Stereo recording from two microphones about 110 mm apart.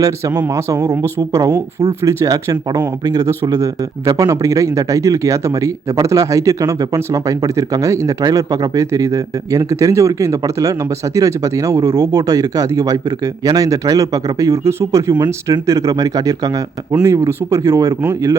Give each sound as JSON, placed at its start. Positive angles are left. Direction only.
{"t": 0.0, "sound": "speech", "side_deg": -30}